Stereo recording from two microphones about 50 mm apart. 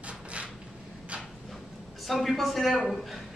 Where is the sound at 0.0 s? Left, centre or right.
Right.